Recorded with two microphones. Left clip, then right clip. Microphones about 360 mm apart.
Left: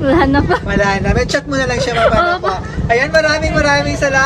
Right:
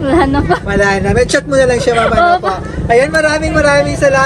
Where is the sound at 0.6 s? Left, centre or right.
Left.